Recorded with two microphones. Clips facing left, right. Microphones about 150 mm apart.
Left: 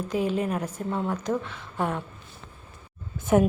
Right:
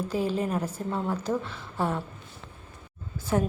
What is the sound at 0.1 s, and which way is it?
Speech, 35° right (ahead or behind).